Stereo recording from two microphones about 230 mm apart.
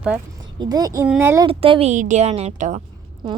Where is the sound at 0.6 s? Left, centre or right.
Centre.